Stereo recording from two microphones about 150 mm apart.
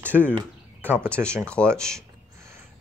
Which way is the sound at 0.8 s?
15° right (ahead or behind).